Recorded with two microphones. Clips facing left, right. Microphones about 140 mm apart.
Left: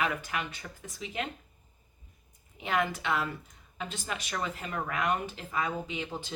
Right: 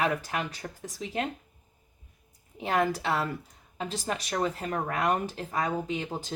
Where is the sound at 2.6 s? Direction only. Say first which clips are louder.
Right 3 dB; 35° right (ahead or behind).